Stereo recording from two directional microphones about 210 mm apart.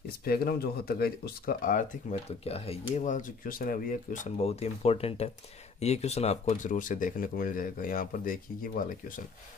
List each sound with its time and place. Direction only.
0.2 s speech: 45° left (ahead or behind)